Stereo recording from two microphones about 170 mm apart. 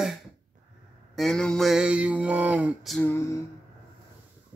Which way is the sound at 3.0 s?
15° left (ahead or behind).